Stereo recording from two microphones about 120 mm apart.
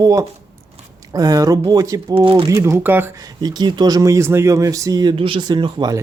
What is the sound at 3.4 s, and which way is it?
Speech, 35° right (ahead or behind).